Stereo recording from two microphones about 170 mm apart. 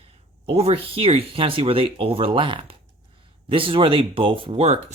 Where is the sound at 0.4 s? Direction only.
35° right (ahead or behind).